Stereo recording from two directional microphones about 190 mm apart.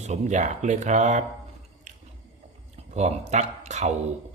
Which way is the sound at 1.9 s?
40° right (ahead or behind).